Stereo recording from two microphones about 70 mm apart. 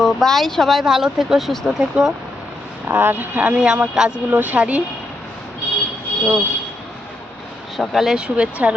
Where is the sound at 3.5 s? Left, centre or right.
Centre.